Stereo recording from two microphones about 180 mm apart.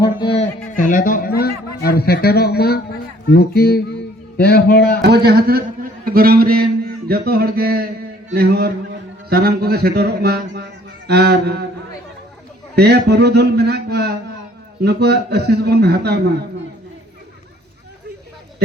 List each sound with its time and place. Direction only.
0.0 s a sound: 25° left (ahead or behind)
0.8 s a man's voice: 45° left (ahead or behind)
5.0 s a man's voice: 60° right (ahead or behind)
12.7 s a man's voice: 60° right (ahead or behind)